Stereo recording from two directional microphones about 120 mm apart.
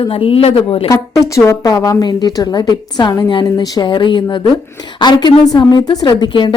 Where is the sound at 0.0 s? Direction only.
50° left (ahead or behind).